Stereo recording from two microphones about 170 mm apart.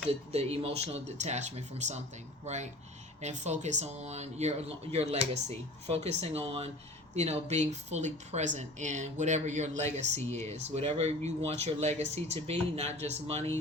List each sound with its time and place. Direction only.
0.1 s speech: 35° right (ahead or behind)
3.2 s speech: 40° right (ahead or behind)